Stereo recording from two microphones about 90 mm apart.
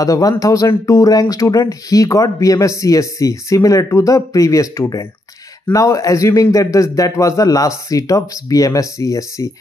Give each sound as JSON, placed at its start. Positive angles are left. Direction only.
{"t": 0.0, "sound": "speech", "side_deg": 40}